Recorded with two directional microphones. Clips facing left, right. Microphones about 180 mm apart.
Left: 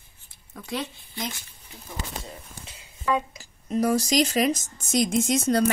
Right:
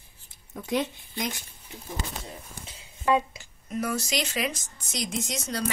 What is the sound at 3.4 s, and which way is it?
Speech, 35° left (ahead or behind).